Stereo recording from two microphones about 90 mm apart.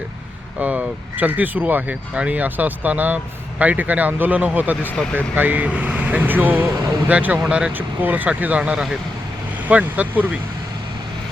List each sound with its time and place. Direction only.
0.6 s speech: 15° right (ahead or behind)